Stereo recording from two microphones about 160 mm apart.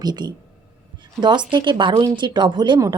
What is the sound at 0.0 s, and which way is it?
A woman's voice, 25° right (ahead or behind).